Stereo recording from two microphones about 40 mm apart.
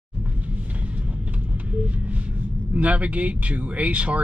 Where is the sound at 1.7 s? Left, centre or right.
Right.